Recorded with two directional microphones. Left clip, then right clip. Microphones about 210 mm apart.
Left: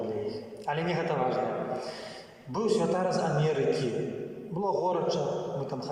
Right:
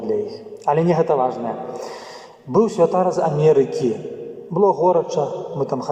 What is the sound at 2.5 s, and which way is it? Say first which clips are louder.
A man's voice: right 11 dB; 55° right (ahead or behind).